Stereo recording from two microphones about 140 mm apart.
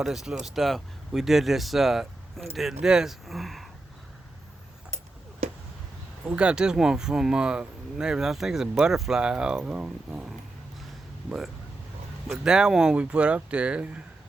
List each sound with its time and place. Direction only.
0.0 s speech: 5° right (ahead or behind)
5.4 s a sound: 50° right (ahead or behind)
6.2 s speech: 5° right (ahead or behind)